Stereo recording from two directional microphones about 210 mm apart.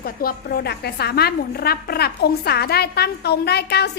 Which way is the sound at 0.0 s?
45° left (ahead or behind).